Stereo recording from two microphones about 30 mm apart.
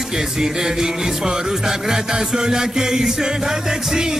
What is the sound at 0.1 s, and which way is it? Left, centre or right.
A man's voice, centre.